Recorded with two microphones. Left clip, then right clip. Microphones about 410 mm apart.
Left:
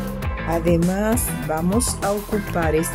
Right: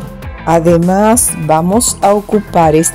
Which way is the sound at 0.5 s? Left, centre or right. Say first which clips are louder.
Right 12 dB; left.